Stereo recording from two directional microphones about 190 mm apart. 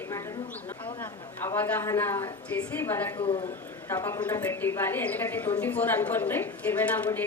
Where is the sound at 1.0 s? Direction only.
10° left (ahead or behind).